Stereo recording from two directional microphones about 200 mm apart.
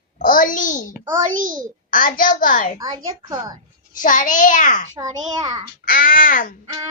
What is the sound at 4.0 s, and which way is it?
Speech, 40° left (ahead or behind).